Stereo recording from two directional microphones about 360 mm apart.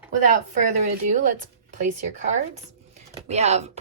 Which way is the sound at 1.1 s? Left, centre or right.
Right.